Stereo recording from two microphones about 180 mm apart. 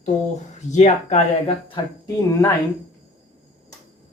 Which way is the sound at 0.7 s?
40° left (ahead or behind).